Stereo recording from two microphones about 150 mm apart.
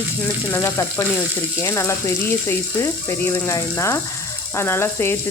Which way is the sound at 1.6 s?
20° left (ahead or behind).